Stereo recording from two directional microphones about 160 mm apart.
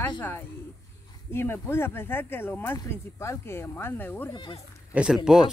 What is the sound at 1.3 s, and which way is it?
Speech, 15° left (ahead or behind).